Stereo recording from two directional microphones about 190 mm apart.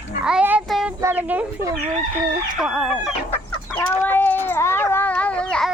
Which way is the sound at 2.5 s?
Centre (ahead or behind).